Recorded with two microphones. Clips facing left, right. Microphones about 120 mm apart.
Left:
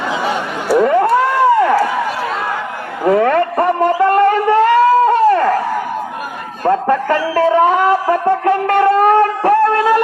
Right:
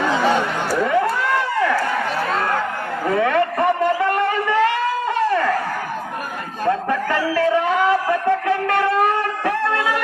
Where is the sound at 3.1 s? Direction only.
45° left (ahead or behind).